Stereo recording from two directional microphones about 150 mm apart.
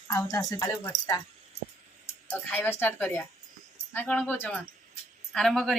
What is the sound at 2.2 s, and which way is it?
A woman's voice, 10° left (ahead or behind).